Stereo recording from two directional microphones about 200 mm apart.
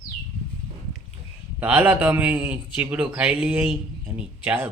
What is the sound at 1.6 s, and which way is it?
A man's voice, 10° right (ahead or behind).